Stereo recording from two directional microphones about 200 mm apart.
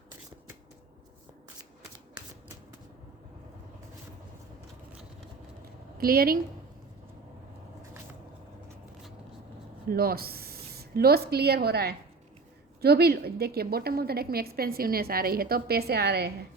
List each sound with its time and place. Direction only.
6.0 s a woman's voice: 50° right (ahead or behind)
9.9 s a woman's voice: 50° right (ahead or behind)